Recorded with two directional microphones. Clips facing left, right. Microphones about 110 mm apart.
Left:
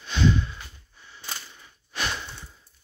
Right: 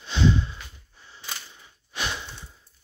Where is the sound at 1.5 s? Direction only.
15° right (ahead or behind).